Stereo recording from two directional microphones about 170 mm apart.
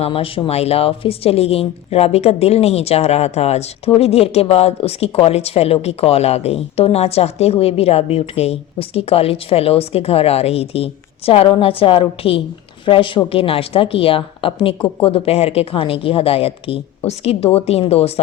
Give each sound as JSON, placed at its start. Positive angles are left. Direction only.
{"t": 0.0, "sound": "speech", "side_deg": 30}